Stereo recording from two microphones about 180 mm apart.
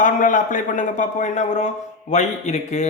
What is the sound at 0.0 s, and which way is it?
A man's voice, 45° left (ahead or behind).